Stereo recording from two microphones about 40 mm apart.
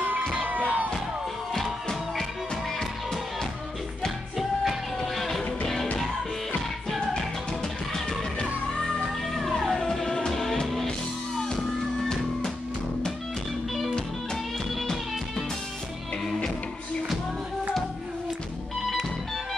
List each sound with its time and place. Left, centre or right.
0.7 s music: right
5.0 s music: centre
8.7 s music: left
9.3 s music: centre
14.8 s music: centre